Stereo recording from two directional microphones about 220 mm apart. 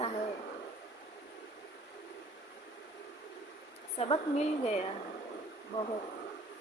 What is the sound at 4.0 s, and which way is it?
Speech, 30° left (ahead or behind).